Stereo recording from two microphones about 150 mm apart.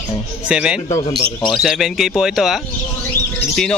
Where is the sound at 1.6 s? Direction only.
Centre (ahead or behind).